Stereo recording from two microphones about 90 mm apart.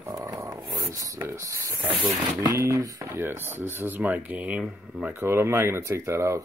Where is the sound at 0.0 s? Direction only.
35° right (ahead or behind).